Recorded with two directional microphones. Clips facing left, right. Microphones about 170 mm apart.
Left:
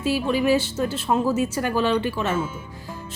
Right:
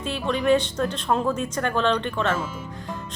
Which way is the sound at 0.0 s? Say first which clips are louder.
Left 3 dB; 5° left (ahead or behind).